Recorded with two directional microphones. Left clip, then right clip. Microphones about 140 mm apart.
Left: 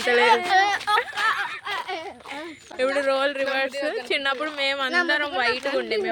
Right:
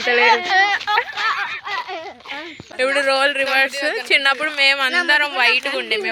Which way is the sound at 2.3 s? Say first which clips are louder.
Right 7 dB; centre (ahead or behind).